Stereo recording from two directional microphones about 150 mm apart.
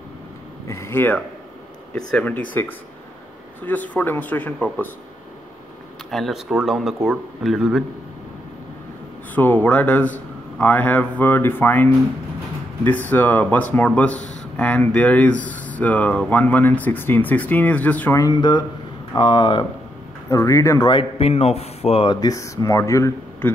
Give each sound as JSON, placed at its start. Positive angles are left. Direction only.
{"t": 0.7, "sound": "speech", "side_deg": 15}
{"t": 3.6, "sound": "speech", "side_deg": 10}
{"t": 6.0, "sound": "speech", "side_deg": 0}
{"t": 9.3, "sound": "speech", "side_deg": 10}
{"t": 13.1, "sound": "speech", "side_deg": 10}
{"t": 18.1, "sound": "speech", "side_deg": 25}
{"t": 20.2, "sound": "speech", "side_deg": 20}
{"t": 20.9, "sound": "speech", "side_deg": 40}